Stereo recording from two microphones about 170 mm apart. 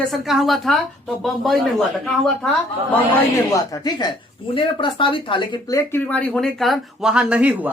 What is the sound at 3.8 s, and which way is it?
Speech, 25° left (ahead or behind).